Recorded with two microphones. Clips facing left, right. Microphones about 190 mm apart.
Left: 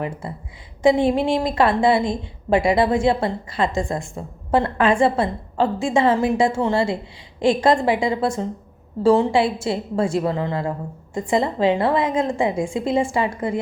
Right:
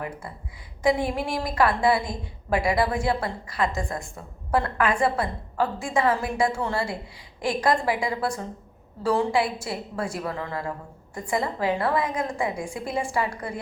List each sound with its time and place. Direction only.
0.0 s a woman's voice: 25° left (ahead or behind)